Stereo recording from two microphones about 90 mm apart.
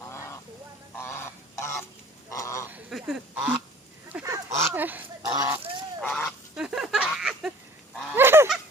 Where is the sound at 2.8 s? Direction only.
5° right (ahead or behind).